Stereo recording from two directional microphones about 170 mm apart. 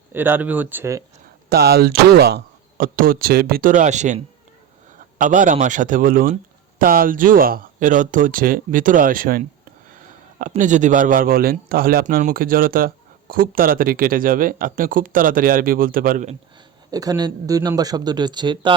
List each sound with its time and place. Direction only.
0.1 s speech: 10° right (ahead or behind)
1.5 s a man's voice: 70° right (ahead or behind)
16.9 s speech: 20° right (ahead or behind)